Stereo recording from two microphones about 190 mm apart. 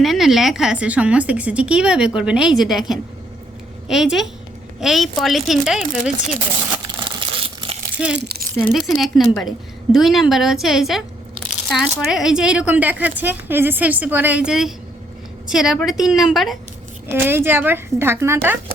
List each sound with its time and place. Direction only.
0.0 s a woman's voice: centre (ahead or behind)
6.8 s a sound: 25° right (ahead or behind)
8.1 s speech: 60° right (ahead or behind)
8.7 s a woman's voice: centre (ahead or behind)
17.1 s speech: 10° right (ahead or behind)